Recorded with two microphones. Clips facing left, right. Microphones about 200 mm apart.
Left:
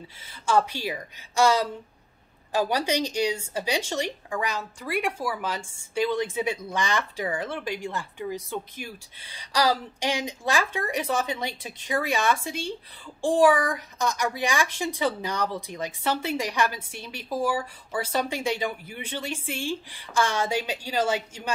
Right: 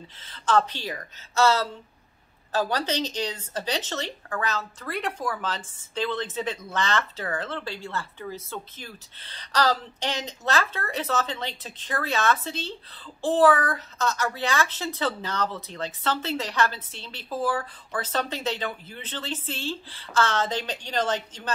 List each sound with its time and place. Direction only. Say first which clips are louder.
0.2 s speech: even; 10° left (ahead or behind)